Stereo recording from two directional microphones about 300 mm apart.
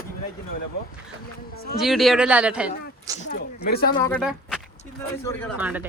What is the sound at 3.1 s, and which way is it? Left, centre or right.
Speech, left.